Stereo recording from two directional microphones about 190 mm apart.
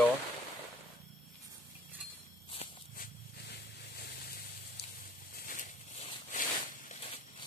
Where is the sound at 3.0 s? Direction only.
55° left (ahead or behind).